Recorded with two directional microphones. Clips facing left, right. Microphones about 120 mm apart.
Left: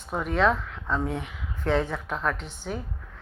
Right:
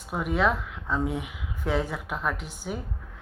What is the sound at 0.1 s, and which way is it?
Speech, 5° right (ahead or behind).